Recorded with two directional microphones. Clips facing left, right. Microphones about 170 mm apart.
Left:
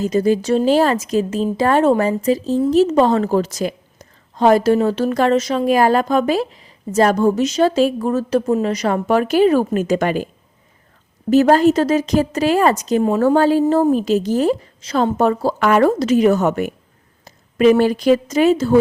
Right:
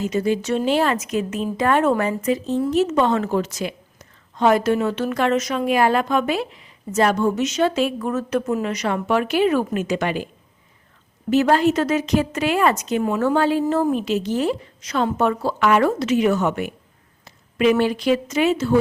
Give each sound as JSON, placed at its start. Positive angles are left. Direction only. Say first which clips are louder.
{"t": 0.0, "sound": "a woman's voice", "louder": "left 5 dB", "side_deg": 40}
{"t": 11.3, "sound": "a woman's voice", "louder": "left 5 dB", "side_deg": 40}